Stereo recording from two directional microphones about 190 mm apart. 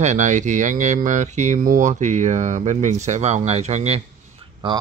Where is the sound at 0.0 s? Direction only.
40° right (ahead or behind).